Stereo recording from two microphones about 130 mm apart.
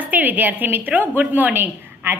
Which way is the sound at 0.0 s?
15° right (ahead or behind).